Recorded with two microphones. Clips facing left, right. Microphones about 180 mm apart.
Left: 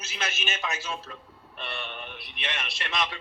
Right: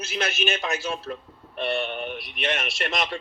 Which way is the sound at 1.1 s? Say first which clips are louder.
Right 10 dB; 45° right (ahead or behind).